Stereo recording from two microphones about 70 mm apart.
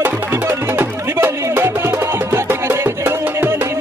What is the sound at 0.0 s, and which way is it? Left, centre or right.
Music, right.